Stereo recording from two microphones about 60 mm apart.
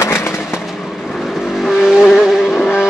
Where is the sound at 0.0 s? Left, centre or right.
Left.